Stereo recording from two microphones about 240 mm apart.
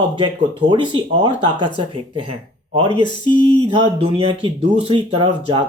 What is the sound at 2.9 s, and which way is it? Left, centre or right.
Speech, centre.